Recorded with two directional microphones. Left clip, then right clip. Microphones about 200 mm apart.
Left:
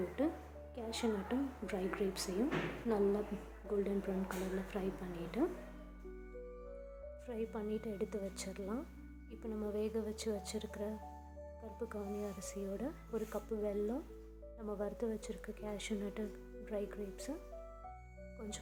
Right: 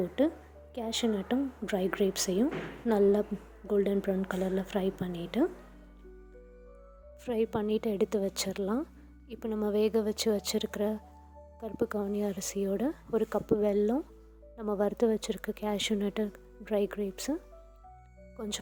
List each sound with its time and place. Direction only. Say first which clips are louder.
0.2 s music: right 9 dB; 35° right (ahead or behind)
0.8 s a woman's voice: right 7 dB; 35° right (ahead or behind)
3.7 s a woman's voice: right 9 dB; 40° right (ahead or behind)
7.3 s speech: right 12 dB; 50° right (ahead or behind)
18.3 s speech: right 11 dB; 45° right (ahead or behind)